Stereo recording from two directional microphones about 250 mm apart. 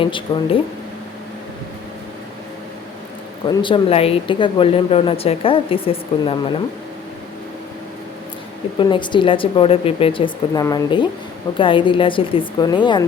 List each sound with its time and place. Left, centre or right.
0.0 s speech: left
3.4 s speech: centre
8.8 s speech: centre